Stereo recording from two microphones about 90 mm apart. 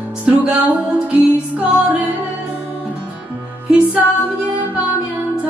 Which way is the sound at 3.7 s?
10° right (ahead or behind).